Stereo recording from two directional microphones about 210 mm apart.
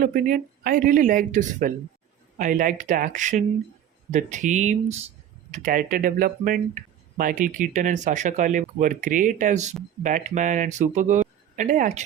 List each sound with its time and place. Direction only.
0.0 s speech: 40° right (ahead or behind)